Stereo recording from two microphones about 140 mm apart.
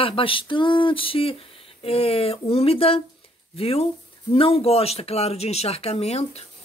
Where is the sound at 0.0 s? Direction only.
40° left (ahead or behind).